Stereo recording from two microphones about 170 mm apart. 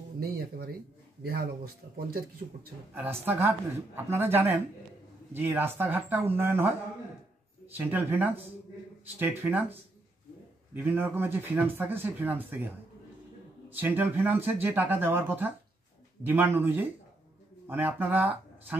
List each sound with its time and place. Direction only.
0.2 s speech: 60° right (ahead or behind)
2.9 s speech: 10° right (ahead or behind)
7.7 s speech: 10° right (ahead or behind)
13.7 s speech: 10° right (ahead or behind)